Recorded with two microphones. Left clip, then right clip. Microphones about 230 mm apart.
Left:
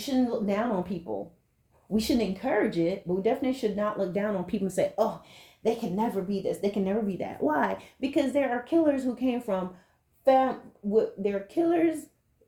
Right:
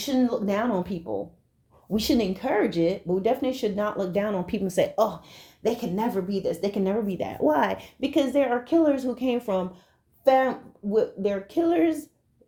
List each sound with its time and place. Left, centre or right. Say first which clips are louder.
0.0 s speech: right 3 dB; right